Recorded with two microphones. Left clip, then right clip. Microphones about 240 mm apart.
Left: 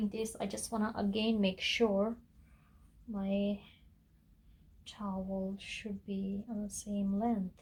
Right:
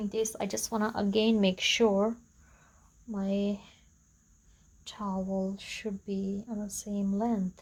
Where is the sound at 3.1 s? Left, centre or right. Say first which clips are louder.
Right 4 dB; right.